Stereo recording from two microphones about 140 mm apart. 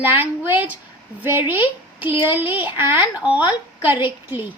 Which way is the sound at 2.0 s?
10° right (ahead or behind).